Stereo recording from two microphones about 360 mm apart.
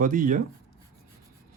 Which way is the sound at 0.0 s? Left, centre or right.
Right.